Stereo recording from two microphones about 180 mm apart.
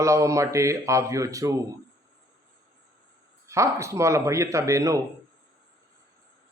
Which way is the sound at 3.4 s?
15° right (ahead or behind).